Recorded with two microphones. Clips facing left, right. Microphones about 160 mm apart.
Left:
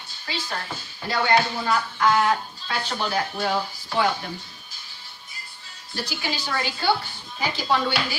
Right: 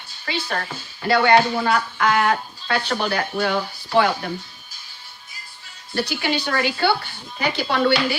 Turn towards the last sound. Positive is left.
turn(degrees=-65)  # may be behind; listen again after turning